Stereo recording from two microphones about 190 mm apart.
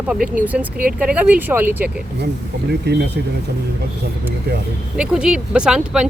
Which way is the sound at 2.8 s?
60° right (ahead or behind).